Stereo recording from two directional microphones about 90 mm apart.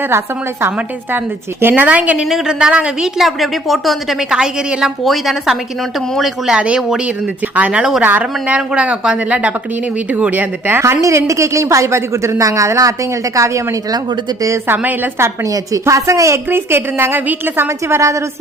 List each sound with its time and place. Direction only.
1.6 s a woman's voice: 15° right (ahead or behind); by 14.8 s 35° right (ahead or behind)
14.8 s a woman's voice: 25° right (ahead or behind)
15.4 s a woman's voice: 40° right (ahead or behind)